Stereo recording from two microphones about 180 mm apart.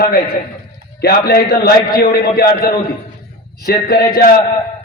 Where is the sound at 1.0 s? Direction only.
60° left (ahead or behind).